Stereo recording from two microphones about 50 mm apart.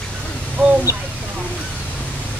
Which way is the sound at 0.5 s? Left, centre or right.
Right.